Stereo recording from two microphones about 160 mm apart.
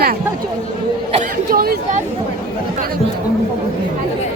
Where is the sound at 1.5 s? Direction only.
65° right (ahead or behind).